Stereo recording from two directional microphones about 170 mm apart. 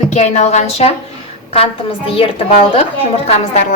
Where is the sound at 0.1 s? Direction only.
40° left (ahead or behind).